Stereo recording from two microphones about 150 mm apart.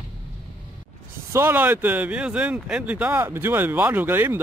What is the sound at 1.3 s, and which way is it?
Speech, 15° right (ahead or behind).